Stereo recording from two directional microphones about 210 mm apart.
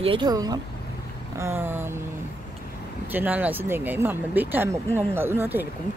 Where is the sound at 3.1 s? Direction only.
10° right (ahead or behind).